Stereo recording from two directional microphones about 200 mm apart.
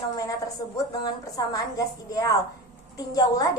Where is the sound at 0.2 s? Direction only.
15° left (ahead or behind).